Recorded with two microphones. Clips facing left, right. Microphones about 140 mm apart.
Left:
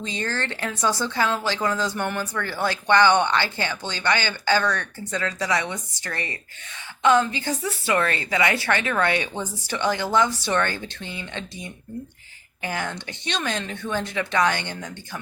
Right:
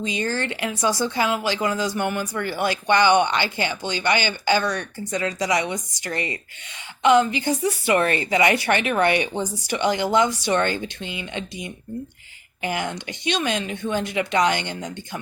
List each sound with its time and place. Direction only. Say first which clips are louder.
0.0 s speech: right 3 dB; 15° right (ahead or behind)